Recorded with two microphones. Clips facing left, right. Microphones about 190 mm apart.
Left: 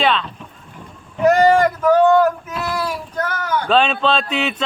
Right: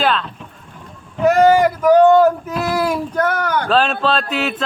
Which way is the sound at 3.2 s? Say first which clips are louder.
Right 2 dB; 65° right (ahead or behind).